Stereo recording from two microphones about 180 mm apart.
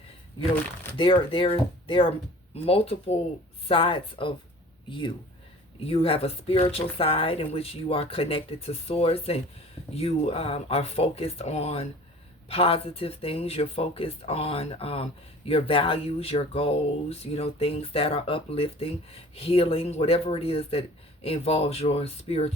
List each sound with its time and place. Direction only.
0.9 s speech: 30° left (ahead or behind)